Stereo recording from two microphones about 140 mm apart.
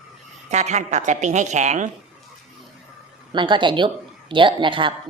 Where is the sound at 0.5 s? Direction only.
55° right (ahead or behind).